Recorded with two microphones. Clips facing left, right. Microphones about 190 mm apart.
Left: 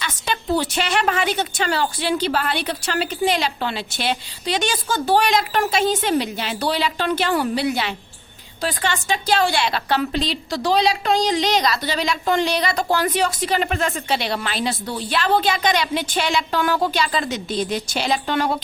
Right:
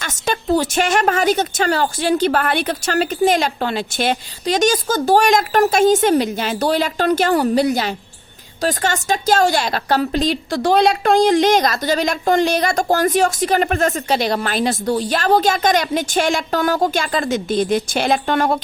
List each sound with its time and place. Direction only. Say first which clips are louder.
0.0 s a woman's voice: right 4 dB; 45° right (ahead or behind)